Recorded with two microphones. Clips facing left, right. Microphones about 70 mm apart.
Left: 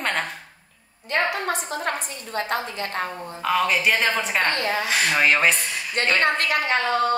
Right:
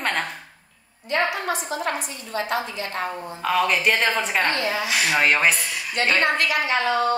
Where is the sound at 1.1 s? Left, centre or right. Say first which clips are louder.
Even; left.